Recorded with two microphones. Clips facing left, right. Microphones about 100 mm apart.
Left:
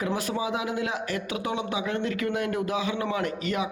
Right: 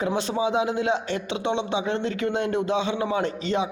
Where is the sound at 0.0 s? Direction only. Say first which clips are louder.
Right 4 dB; 25° right (ahead or behind).